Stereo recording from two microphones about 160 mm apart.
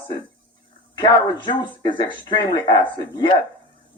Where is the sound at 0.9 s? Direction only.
30° left (ahead or behind).